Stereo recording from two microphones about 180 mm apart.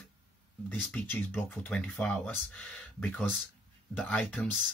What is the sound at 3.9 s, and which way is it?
Speech, 10° left (ahead or behind).